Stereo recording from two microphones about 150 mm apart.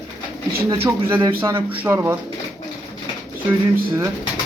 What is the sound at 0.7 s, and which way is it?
Speech, 15° right (ahead or behind).